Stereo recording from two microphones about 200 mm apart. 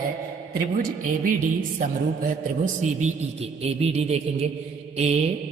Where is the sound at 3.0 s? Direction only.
30° right (ahead or behind).